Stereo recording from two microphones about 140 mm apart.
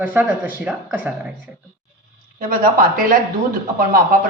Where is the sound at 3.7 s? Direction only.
90° right.